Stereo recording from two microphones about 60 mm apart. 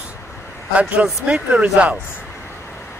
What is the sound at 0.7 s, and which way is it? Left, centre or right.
Speech, right.